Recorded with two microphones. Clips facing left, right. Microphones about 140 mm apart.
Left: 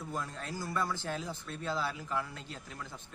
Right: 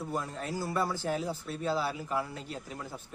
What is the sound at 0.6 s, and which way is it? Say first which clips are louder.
Speech: right 3 dB; 30° right (ahead or behind).